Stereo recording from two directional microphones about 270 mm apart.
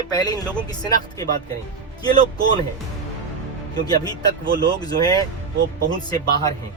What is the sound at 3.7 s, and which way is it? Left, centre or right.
Speech, centre.